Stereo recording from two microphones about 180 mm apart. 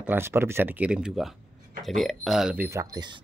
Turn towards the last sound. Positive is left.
turn(degrees=-20)  # may be behind; listen again after turning